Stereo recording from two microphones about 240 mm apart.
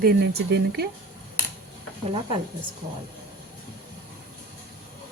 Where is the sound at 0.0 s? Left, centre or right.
Right.